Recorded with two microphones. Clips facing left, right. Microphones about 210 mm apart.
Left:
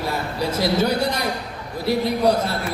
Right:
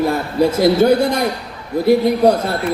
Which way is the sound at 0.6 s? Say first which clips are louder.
Right 7 dB; 50° right (ahead or behind).